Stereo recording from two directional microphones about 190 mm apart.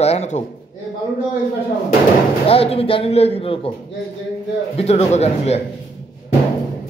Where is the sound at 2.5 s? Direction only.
30° left (ahead or behind).